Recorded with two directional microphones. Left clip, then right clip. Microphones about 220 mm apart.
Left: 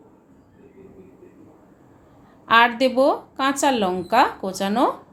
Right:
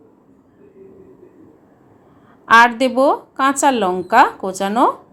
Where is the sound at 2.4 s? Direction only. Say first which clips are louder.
Right 5 dB; 15° right (ahead or behind).